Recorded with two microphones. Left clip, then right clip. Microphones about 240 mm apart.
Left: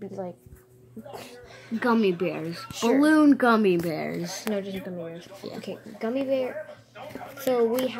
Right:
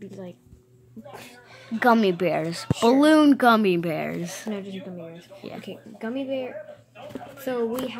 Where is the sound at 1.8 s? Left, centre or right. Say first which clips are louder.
Right 4 dB; right.